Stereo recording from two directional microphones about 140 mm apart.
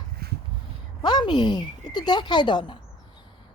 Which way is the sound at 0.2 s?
90° right.